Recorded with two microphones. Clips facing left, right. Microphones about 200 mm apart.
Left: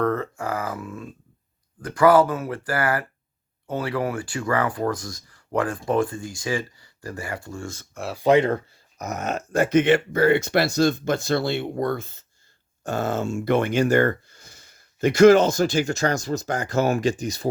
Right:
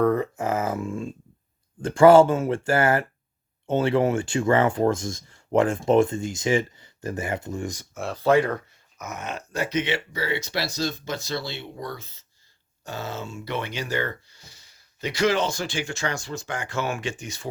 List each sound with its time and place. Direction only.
0.0 s a sound: 15° right (ahead or behind)
1.8 s speech: 25° right (ahead or behind)
7.9 s speech: centre (ahead or behind)
8.2 s speech: 20° left (ahead or behind); by 17.5 s 35° left (ahead or behind)